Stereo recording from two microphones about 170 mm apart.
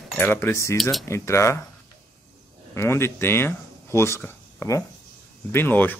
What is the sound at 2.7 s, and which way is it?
Speech, 15° left (ahead or behind).